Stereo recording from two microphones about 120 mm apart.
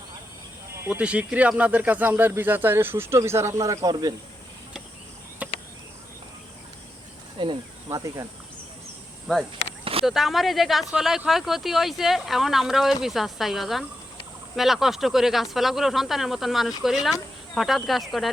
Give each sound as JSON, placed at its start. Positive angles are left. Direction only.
{"t": 0.9, "sound": "speech", "side_deg": -10}
{"t": 5.4, "sound": "a sound", "side_deg": -10}
{"t": 7.3, "sound": "speech", "side_deg": -45}
{"t": 7.9, "sound": "speech", "side_deg": -30}
{"t": 9.8, "sound": "a sound", "side_deg": -50}
{"t": 10.1, "sound": "speech", "side_deg": 0}